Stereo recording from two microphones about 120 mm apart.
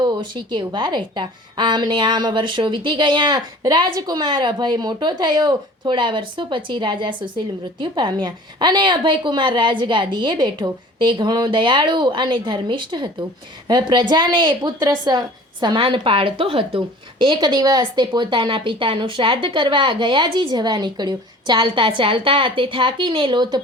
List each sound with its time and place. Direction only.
0.0 s a woman's voice: 40° right (ahead or behind)